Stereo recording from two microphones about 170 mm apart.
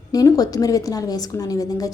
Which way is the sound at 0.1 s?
20° left (ahead or behind).